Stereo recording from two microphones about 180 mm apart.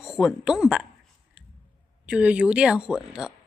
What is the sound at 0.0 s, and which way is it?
Speech, 5° right (ahead or behind).